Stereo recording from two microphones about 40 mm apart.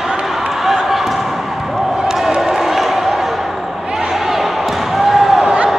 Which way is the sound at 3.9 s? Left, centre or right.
Centre.